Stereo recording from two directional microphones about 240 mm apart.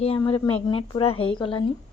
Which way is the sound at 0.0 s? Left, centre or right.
Left.